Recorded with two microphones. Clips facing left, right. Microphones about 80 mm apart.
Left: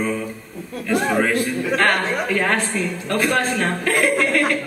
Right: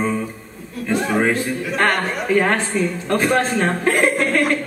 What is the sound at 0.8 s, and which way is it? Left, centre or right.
A man's voice, right.